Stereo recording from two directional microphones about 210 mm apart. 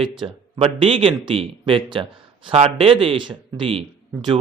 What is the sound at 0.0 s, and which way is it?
Speech, 25° right (ahead or behind).